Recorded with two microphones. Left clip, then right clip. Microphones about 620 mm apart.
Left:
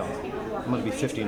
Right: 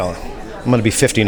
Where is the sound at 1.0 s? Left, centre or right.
Right.